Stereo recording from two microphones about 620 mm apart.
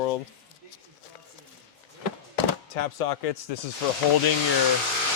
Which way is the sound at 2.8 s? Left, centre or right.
Left.